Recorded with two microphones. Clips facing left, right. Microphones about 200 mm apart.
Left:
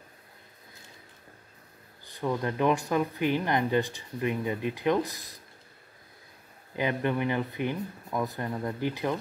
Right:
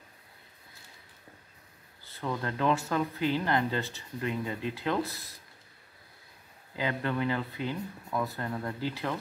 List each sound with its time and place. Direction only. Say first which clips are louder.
2.0 s speech: left 4 dB; 15° left (ahead or behind)
6.7 s speech: left 3 dB; 20° left (ahead or behind)